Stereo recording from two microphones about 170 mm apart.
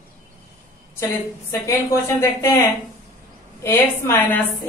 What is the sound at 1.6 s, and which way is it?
Speech, 15° left (ahead or behind).